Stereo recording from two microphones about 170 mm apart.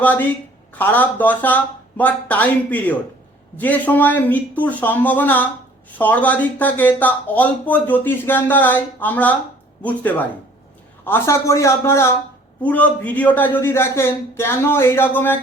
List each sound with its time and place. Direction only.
0.0 s speech: 10° left (ahead or behind)